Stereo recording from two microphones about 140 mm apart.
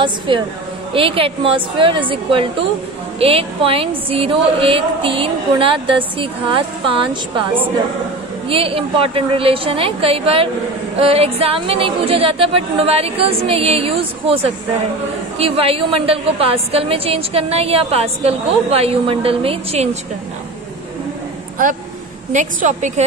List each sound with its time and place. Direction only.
0.3 s a woman's voice: 35° right (ahead or behind)
22.3 s a woman's voice: 60° right (ahead or behind)